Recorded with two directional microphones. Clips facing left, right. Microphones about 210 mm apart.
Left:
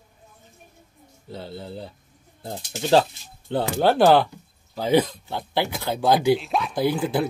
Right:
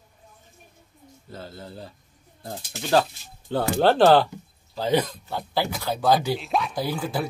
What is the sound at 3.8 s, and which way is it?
Speech, 10° left (ahead or behind).